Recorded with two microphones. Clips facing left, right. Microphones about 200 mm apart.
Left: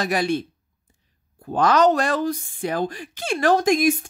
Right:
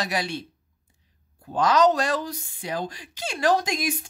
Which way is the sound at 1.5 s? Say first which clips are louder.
Left 2 dB; 60° left (ahead or behind).